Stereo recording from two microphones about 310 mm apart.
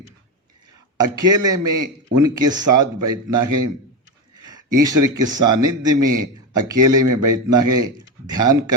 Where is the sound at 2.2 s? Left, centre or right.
Centre.